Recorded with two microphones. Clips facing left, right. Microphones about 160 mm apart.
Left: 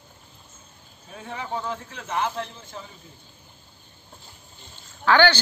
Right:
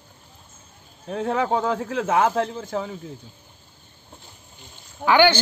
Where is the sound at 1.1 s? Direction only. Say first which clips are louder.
Right 10 dB; 90° right.